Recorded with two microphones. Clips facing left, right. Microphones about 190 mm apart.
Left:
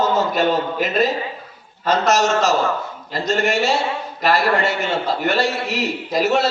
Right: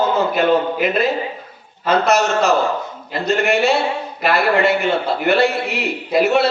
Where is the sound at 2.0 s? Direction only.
40° left (ahead or behind).